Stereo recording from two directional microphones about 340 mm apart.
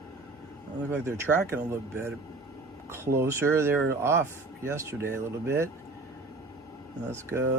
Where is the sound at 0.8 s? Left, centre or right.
Centre.